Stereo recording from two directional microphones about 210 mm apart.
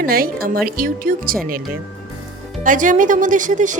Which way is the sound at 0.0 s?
45° right (ahead or behind).